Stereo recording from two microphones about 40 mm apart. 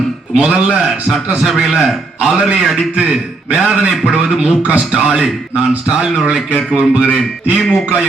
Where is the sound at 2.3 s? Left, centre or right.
Right.